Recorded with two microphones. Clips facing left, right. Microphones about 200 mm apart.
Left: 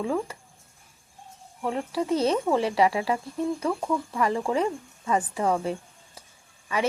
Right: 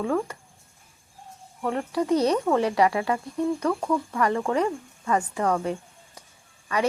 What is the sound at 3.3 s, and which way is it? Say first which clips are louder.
Speech: right 2 dB; 5° left (ahead or behind).